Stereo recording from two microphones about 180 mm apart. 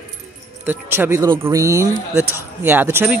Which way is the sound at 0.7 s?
10° right (ahead or behind).